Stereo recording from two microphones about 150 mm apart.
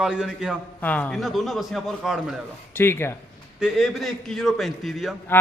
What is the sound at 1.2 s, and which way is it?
A man's voice, centre (ahead or behind).